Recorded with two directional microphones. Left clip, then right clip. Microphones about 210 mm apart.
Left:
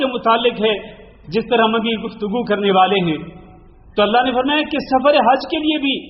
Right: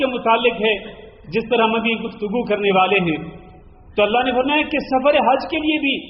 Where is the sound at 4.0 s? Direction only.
30° left (ahead or behind).